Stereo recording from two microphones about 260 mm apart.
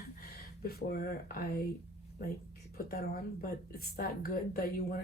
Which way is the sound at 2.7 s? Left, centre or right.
Left.